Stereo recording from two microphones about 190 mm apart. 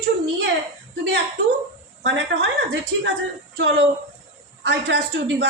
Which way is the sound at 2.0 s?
70° right (ahead or behind).